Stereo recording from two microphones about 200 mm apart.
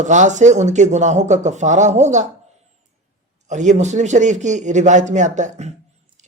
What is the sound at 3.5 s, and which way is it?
A woman's voice, 35° right (ahead or behind).